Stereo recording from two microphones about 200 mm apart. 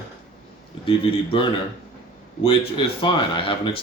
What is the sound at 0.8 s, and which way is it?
Speech, 25° left (ahead or behind).